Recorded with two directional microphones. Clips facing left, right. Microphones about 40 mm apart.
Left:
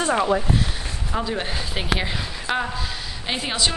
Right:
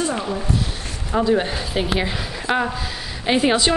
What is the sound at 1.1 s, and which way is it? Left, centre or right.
A woman's voice, centre.